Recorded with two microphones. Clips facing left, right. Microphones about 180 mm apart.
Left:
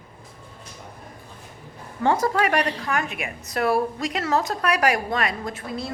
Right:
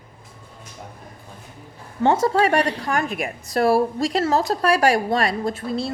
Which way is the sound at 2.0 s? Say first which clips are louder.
Right 3 dB; 25° right (ahead or behind).